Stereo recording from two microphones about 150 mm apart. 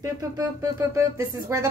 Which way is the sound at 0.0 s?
20° right (ahead or behind).